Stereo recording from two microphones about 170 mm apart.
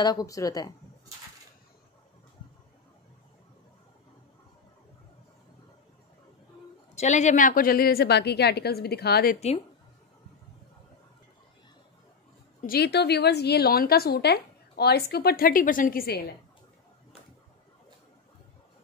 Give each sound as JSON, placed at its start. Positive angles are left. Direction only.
{"t": 0.0, "sound": "speech", "side_deg": 20}
{"t": 7.0, "sound": "a woman's voice", "side_deg": 45}
{"t": 12.6, "sound": "a woman's voice", "side_deg": 70}